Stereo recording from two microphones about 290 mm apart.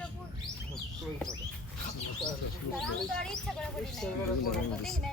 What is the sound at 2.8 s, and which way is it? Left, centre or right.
A man's voice, centre.